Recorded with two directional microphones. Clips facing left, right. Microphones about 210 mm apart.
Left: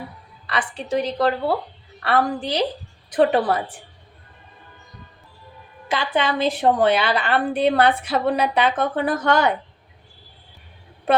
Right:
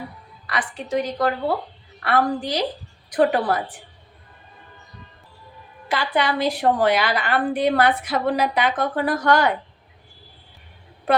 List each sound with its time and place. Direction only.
0.4 s a woman's voice: 30° left (ahead or behind)
5.9 s a woman's voice: 20° left (ahead or behind)